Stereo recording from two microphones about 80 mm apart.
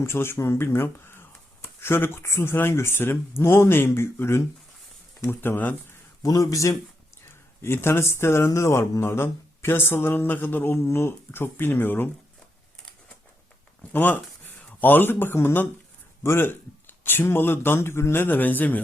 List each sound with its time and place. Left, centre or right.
0.0 s speech: left
6.2 s a man's voice: left
7.6 s speech: left
13.9 s speech: left